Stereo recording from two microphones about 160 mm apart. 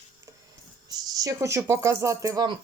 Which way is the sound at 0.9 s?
25° right (ahead or behind).